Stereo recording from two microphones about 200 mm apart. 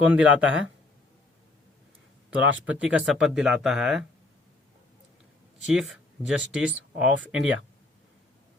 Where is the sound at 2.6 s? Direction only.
5° right (ahead or behind).